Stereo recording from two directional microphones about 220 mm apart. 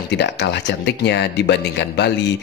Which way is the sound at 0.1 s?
50° left (ahead or behind).